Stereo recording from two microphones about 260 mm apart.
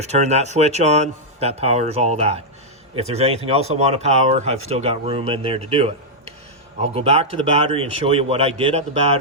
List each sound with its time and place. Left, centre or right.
0.0 s speech: right